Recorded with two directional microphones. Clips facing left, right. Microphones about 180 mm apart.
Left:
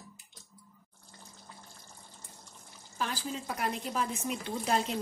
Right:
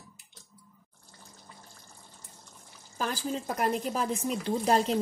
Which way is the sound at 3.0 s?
45° right (ahead or behind).